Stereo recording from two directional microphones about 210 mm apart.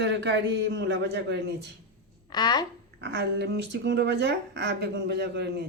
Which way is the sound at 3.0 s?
55° right (ahead or behind).